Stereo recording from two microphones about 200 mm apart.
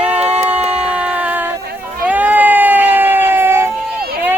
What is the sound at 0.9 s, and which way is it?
Music, 5° right (ahead or behind).